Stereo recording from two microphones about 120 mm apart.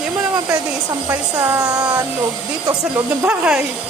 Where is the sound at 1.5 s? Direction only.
35° right (ahead or behind).